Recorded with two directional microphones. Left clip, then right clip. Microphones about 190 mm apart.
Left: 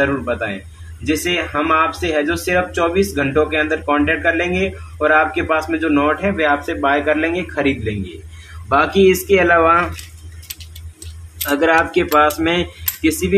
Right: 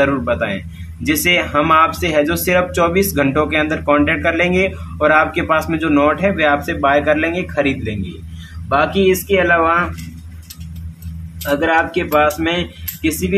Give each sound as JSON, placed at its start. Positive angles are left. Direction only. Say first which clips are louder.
{"t": 1.0, "sound": "speech", "louder": "right 4 dB", "side_deg": -25}
{"t": 11.4, "sound": "speech", "louder": "left 1 dB", "side_deg": 0}